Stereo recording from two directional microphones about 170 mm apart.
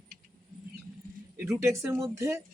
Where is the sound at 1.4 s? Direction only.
15° right (ahead or behind).